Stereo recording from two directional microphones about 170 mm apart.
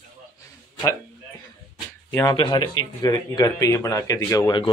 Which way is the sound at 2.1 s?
15° left (ahead or behind).